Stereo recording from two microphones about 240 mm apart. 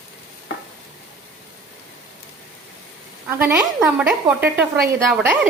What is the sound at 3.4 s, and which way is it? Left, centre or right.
Speech, centre.